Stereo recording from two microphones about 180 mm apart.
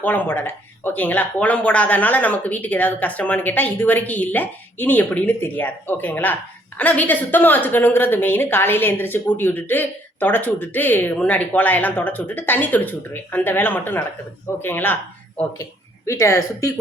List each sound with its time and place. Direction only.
0.0 s a woman's voice: 10° left (ahead or behind)
16.0 s a woman's voice: 15° left (ahead or behind)